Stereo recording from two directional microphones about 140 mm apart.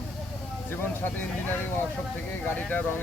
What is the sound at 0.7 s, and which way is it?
Speech, 15° left (ahead or behind).